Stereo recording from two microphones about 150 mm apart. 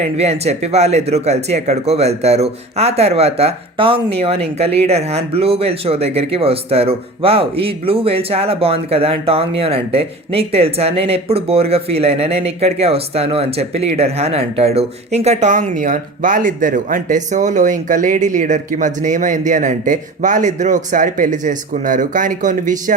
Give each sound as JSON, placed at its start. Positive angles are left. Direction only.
{"t": 0.0, "sound": "speech", "side_deg": -45}